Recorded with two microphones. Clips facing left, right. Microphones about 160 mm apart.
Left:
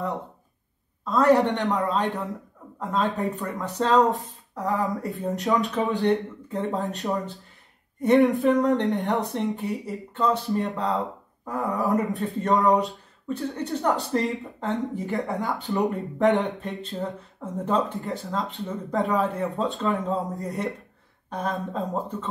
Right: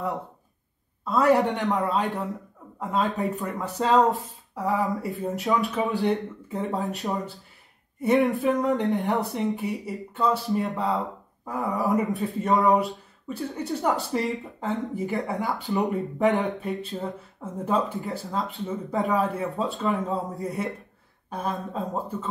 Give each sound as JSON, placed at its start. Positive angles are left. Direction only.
{"t": 1.0, "sound": "speech", "side_deg": -5}